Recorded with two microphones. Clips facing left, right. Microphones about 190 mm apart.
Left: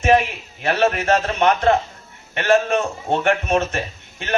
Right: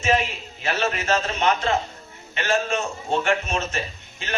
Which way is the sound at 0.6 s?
55° left (ahead or behind).